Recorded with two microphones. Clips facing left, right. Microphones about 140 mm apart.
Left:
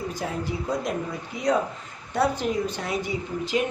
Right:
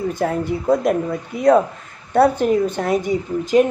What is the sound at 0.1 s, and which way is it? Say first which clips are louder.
A woman's voice: right 9 dB; 55° right (ahead or behind).